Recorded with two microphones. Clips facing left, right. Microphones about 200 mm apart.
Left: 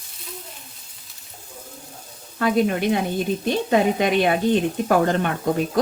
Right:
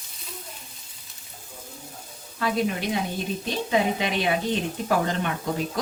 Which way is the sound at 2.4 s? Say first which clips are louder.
Left 6 dB; 55° left (ahead or behind).